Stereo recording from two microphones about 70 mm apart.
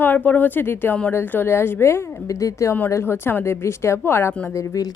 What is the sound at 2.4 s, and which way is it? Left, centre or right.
Speech, left.